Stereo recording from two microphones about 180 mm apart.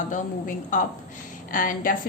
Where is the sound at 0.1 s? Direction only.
45° left (ahead or behind).